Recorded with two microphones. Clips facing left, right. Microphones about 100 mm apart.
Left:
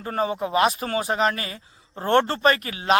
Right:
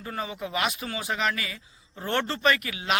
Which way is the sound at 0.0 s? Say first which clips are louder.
Left 8 dB; 40° left (ahead or behind).